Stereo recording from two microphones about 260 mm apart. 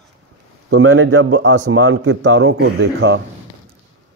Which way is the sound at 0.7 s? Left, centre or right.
Right.